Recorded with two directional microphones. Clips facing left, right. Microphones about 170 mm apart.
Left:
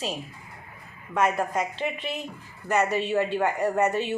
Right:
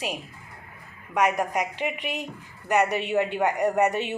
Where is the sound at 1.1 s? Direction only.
15° right (ahead or behind).